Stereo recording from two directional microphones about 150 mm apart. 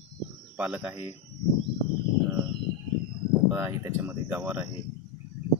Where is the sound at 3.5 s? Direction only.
15° right (ahead or behind).